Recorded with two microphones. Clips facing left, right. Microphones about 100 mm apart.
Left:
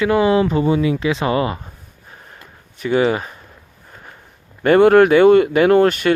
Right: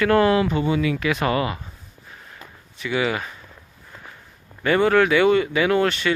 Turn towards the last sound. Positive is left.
turn(degrees=45)  # may be behind; listen again after turning